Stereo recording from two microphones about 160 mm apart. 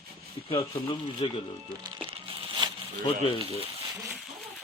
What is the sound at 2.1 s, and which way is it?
Crumpling, 35° right (ahead or behind).